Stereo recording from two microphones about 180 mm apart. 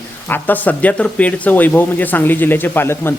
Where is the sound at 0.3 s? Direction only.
10° left (ahead or behind).